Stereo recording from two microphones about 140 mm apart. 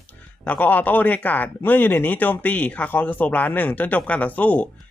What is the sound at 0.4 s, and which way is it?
Speech, 10° left (ahead or behind).